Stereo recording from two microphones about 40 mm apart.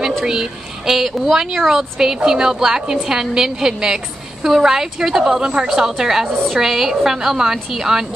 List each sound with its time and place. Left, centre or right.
0.2 s a woman's voice: centre
5.3 s a woman's voice: centre